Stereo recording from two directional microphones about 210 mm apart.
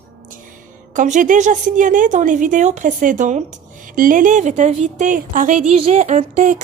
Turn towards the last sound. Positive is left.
turn(degrees=-35)  # may be behind; listen again after turning